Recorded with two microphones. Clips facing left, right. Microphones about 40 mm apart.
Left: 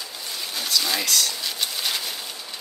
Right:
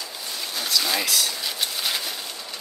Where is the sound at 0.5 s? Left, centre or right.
Centre.